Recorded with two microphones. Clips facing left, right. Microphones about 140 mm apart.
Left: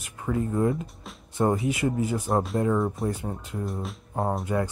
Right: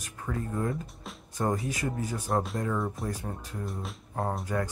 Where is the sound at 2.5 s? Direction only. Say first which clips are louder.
Left 7 dB; 25° left (ahead or behind).